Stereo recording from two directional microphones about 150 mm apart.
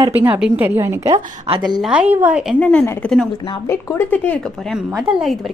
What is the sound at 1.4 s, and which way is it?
Speech, 30° right (ahead or behind).